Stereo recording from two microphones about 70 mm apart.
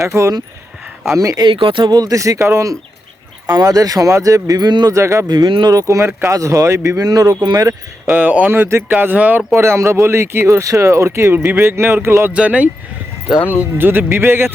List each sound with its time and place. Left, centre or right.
0.1 s speech: right
1.4 s speech: right
3.6 s speech: right
4.9 s speech: right
5.3 s speech: right
5.7 s speech: right
7.0 s speech: right
8.1 s speech: right
9.5 s speech: right
12.3 s speech: centre
13.7 s speech: right